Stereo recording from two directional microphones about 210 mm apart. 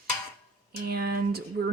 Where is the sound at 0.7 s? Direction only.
45° right (ahead or behind).